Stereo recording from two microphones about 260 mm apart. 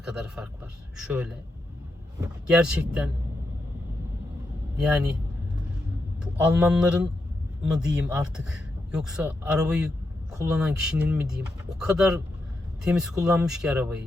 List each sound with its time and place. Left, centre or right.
0.0 s speech: centre
2.5 s speech: centre
4.8 s speech: centre
6.2 s speech: centre